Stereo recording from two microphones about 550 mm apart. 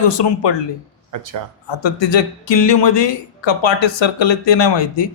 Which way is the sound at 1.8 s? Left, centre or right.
Left.